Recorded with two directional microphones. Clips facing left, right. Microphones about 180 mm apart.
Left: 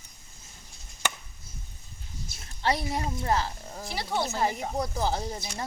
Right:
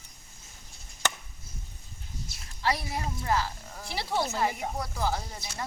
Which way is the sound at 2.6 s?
25° left (ahead or behind).